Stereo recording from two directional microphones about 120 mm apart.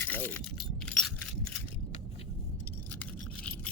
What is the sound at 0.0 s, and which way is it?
Keys jangling, 15° left (ahead or behind).